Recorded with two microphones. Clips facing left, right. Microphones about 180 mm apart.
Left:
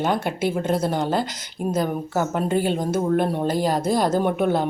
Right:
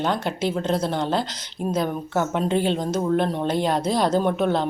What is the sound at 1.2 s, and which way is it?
Speech, 50° left (ahead or behind).